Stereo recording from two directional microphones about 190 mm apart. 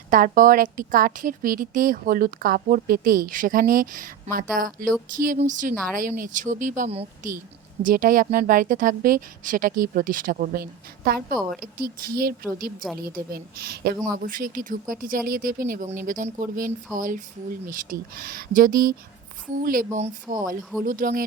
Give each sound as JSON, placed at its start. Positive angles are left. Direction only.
{"t": 0.1, "sound": "a woman's voice", "side_deg": -45}